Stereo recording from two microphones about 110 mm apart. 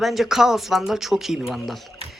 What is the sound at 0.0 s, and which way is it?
Speech, centre (ahead or behind).